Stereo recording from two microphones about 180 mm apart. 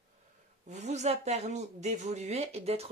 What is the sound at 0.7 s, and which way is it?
Speech, 40° right (ahead or behind).